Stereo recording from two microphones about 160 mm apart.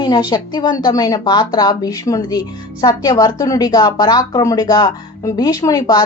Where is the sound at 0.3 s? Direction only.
30° left (ahead or behind).